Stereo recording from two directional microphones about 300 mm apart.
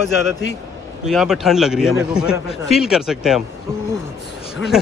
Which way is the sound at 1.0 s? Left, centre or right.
Centre.